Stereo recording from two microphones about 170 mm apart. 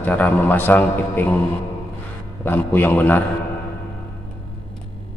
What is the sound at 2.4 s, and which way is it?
Speech, 10° left (ahead or behind).